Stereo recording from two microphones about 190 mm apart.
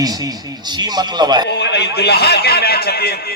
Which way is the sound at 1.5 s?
65° left (ahead or behind).